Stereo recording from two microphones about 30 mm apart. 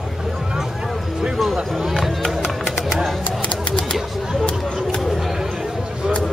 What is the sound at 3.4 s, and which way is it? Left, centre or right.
Music, left.